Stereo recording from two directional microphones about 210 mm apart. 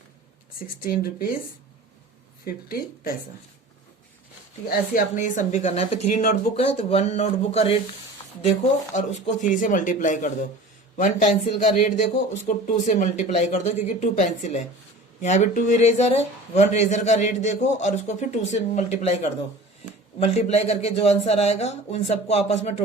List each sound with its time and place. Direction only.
0.9 s speech: 45° left (ahead or behind)
2.4 s speech: 45° left (ahead or behind)
4.9 s speech: 35° left (ahead or behind)